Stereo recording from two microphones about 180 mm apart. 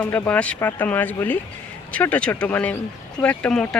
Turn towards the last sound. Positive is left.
turn(degrees=5)  # may be behind; listen again after turning